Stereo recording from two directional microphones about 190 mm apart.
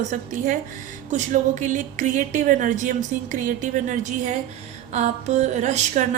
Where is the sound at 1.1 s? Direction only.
40° right (ahead or behind).